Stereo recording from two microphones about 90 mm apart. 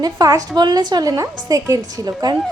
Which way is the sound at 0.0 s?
45° right (ahead or behind).